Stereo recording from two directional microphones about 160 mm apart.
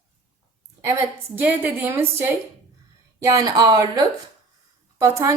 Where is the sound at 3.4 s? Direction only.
25° right (ahead or behind).